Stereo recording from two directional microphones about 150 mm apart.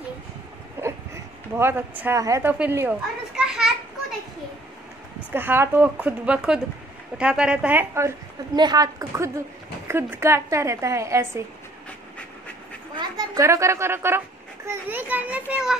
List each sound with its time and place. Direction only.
0.8 s a sound: 15° right (ahead or behind)
1.6 s a woman's voice: 15° right (ahead or behind)
2.6 s children playing: 10° right (ahead or behind)
5.3 s a woman's voice: 15° right (ahead or behind)
8.5 s speech: 25° right (ahead or behind)
12.9 s a child's voice: 30° right (ahead or behind); by 15.8 s 5° right (ahead or behind)